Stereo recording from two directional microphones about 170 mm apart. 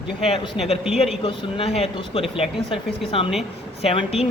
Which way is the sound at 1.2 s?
35° left (ahead or behind).